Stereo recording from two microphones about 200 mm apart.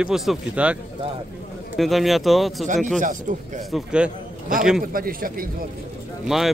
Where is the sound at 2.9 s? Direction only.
40° right (ahead or behind).